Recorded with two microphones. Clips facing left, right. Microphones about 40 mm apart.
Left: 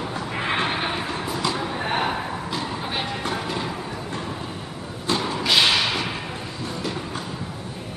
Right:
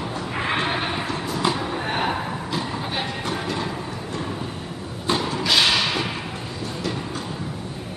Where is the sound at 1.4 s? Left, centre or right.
Right.